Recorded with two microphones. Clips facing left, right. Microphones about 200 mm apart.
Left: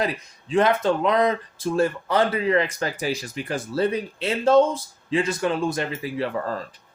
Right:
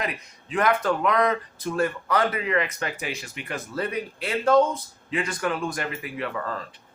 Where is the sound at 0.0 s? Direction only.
30° left (ahead or behind).